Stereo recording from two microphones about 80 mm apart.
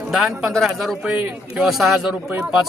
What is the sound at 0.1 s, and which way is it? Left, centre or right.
A man's voice, centre.